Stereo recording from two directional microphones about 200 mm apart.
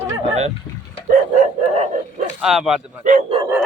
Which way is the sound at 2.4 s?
Centre (ahead or behind).